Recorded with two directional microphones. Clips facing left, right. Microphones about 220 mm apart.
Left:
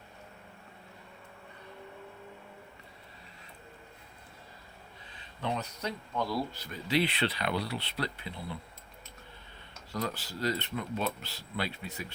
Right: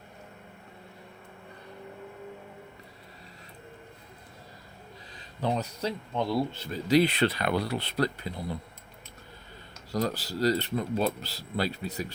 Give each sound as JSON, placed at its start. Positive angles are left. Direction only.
{"t": 5.1, "sound": "speech", "side_deg": -35}
{"t": 6.8, "sound": "speech", "side_deg": -40}
{"t": 9.9, "sound": "speech", "side_deg": -40}